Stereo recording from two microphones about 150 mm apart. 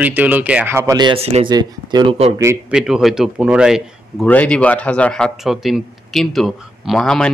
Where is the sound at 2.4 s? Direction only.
15° right (ahead or behind).